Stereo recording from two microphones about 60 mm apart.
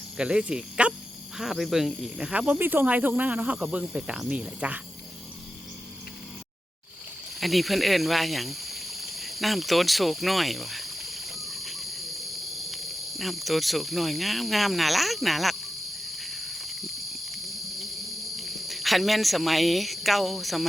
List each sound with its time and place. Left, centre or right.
0.2 s speech: centre
1.4 s speech: centre
2.6 s cricket: right
3.2 s speech: right
7.3 s a sound: centre
16.1 s cricket: centre
18.3 s speech: centre